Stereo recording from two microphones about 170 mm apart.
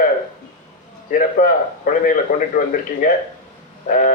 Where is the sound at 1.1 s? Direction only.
55° left (ahead or behind).